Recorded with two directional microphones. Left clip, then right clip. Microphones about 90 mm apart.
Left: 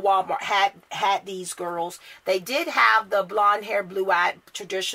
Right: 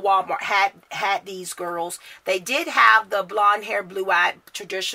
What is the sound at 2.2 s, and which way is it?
Speech, 15° right (ahead or behind).